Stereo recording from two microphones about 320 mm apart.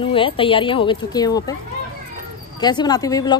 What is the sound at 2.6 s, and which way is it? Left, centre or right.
Speech, centre.